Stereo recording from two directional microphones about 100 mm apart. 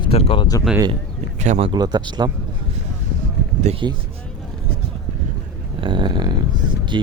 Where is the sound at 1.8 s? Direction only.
45° right (ahead or behind).